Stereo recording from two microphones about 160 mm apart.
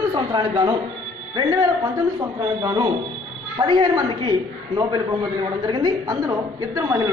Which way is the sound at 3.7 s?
30° right (ahead or behind).